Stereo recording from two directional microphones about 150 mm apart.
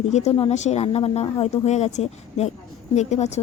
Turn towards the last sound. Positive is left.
turn(degrees=50)  # may be behind; listen again after turning